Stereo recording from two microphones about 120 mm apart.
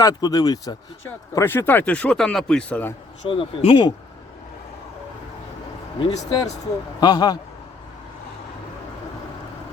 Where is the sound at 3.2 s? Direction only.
50° left (ahead or behind).